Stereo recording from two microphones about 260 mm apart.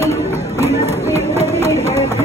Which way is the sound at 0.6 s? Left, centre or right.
Right.